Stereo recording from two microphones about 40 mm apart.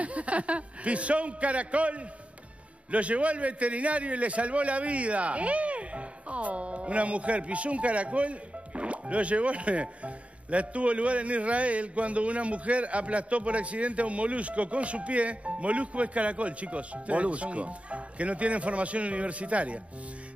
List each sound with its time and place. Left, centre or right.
0.0 s a man's voice: right